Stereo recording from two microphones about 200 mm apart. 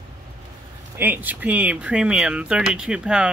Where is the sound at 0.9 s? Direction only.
10° right (ahead or behind).